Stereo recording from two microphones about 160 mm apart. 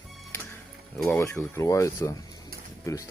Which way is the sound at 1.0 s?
15° left (ahead or behind).